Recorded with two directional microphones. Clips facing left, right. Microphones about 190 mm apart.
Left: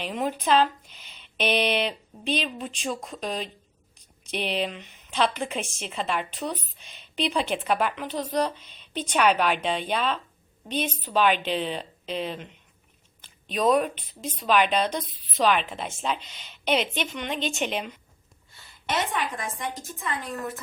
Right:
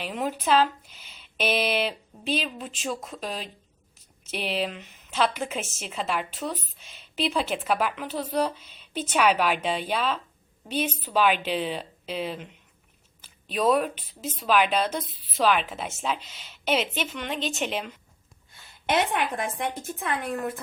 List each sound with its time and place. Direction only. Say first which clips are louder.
0.0 s a woman's voice: left 1 dB; 5° right (ahead or behind)
18.9 s speech: right 3 dB; 60° right (ahead or behind)